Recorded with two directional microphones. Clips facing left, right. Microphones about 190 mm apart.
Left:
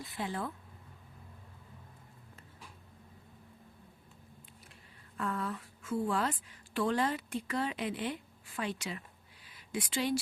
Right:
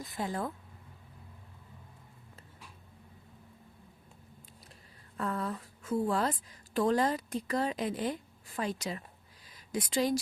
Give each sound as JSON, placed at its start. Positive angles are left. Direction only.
{"t": 0.0, "sound": "speech", "side_deg": -40}
{"t": 4.6, "sound": "speech", "side_deg": -35}